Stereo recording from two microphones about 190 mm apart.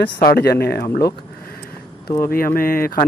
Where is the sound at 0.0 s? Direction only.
55° left (ahead or behind).